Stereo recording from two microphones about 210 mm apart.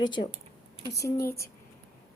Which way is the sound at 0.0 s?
20° left (ahead or behind).